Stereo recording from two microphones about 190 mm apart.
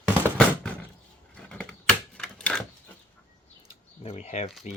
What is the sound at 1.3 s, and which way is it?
Typewriter, 5° left (ahead or behind).